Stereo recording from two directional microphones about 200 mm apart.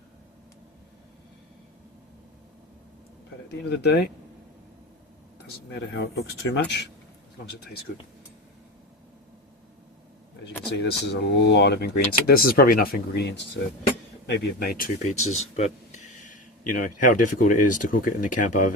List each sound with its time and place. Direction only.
3.5 s speech: 55° left (ahead or behind)
5.5 s speech: 60° left (ahead or behind)
10.8 s speech: 55° left (ahead or behind)
15.0 s speech: 35° left (ahead or behind)